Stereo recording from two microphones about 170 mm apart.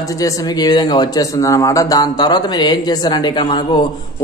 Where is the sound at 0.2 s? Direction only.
25° left (ahead or behind).